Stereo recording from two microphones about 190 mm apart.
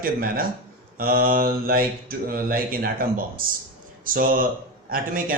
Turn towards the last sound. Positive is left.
turn(degrees=-50)  # may be behind; listen again after turning